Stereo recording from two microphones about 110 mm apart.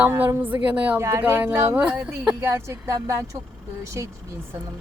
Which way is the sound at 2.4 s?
25° right (ahead or behind).